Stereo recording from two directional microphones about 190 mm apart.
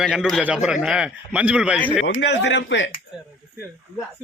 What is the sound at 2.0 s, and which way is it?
Speech, 75° left (ahead or behind).